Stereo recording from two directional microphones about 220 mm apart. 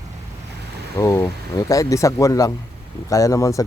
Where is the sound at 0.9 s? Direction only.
15° left (ahead or behind).